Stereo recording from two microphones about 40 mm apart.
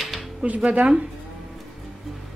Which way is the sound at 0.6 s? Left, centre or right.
Right.